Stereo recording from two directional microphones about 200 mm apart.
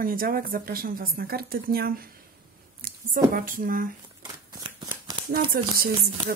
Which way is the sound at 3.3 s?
45° right (ahead or behind).